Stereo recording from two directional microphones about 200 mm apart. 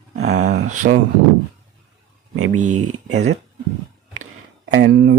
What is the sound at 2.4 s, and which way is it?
Speech, 90° right.